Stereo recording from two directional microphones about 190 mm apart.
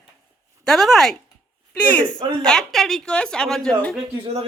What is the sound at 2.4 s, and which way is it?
A woman's voice, 5° left (ahead or behind).